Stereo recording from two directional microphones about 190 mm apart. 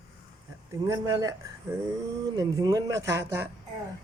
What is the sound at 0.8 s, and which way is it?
Speech, 15° right (ahead or behind).